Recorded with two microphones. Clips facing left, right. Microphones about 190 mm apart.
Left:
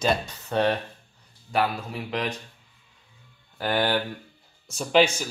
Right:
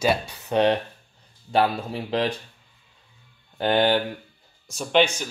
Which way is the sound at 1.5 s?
30° right (ahead or behind).